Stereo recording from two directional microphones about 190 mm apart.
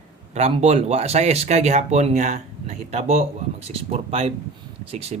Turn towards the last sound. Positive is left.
turn(degrees=-35)  # may be behind; listen again after turning